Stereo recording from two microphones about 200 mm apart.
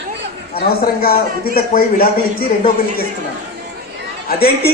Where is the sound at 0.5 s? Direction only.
50° left (ahead or behind).